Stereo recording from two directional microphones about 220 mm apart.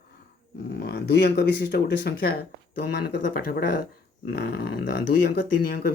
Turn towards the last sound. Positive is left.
turn(degrees=45)  # may be behind; listen again after turning